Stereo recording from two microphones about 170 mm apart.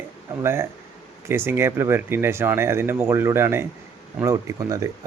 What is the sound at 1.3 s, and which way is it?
Speech, 15° right (ahead or behind).